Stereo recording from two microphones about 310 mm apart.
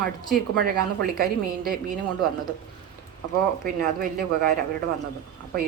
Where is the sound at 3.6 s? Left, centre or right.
Right.